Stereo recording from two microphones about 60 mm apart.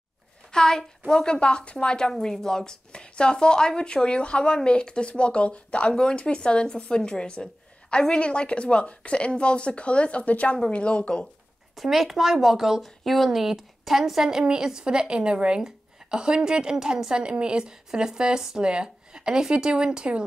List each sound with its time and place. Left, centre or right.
0.5 s a woman's voice: centre
11.7 s speech: centre